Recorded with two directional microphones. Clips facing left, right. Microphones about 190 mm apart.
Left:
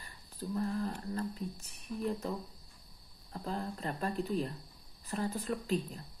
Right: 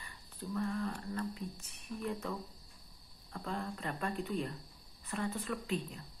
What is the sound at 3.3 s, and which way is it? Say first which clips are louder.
Speech: left 2 dB; 35° left (ahead or behind).